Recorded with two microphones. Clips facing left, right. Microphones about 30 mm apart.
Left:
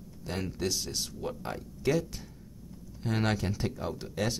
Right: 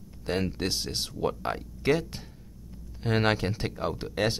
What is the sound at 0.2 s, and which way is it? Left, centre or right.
Speech, right.